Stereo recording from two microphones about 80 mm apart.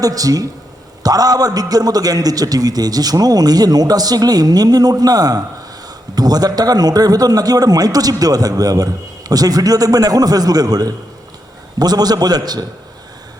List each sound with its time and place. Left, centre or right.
0.0 s a man's voice: right